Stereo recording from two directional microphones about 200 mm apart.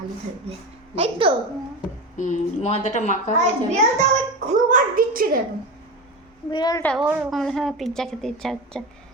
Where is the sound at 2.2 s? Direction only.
35° left (ahead or behind).